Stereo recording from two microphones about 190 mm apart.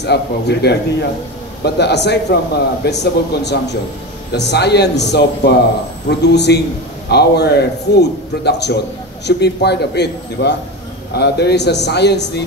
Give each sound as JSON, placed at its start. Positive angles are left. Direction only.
{"t": 0.0, "sound": "a man's voice", "side_deg": 60}